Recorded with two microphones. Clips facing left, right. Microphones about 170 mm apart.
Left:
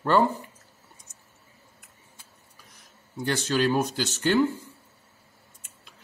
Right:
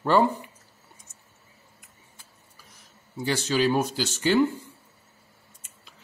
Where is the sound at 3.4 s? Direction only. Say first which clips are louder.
Right 1 dB; 5° right (ahead or behind).